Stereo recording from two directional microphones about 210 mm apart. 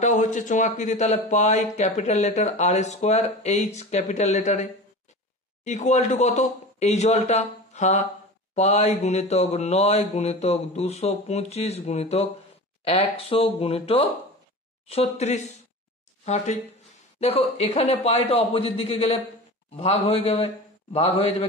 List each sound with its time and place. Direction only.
0.0 s speech: 35° left (ahead or behind)
17.2 s speech: 30° left (ahead or behind)